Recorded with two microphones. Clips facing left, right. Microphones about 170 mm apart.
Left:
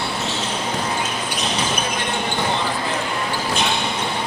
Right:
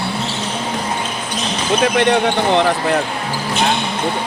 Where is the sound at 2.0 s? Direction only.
70° right (ahead or behind).